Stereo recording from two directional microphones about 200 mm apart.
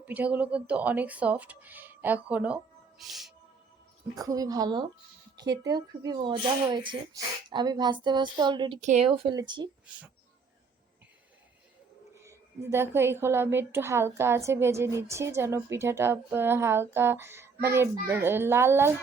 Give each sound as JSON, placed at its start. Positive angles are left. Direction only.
{"t": 0.0, "sound": "a woman's voice", "side_deg": -5}
{"t": 3.0, "sound": "music", "side_deg": 0}
{"t": 4.1, "sound": "a woman's voice", "side_deg": -15}
{"t": 8.8, "sound": "speech", "side_deg": -35}
{"t": 9.1, "sound": "a child's voice", "side_deg": -20}
{"t": 9.8, "sound": "speech", "side_deg": -5}
{"t": 12.1, "sound": "a woman's voice", "side_deg": -15}